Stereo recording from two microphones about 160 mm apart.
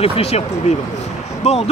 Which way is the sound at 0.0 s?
40° left (ahead or behind).